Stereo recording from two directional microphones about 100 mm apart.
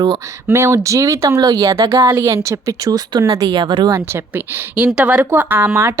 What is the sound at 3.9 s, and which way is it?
Speech, 25° right (ahead or behind).